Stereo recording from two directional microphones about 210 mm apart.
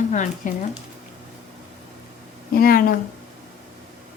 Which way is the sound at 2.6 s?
45° left (ahead or behind).